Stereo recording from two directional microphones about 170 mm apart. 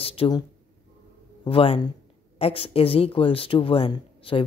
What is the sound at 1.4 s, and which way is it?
Speech, 35° left (ahead or behind).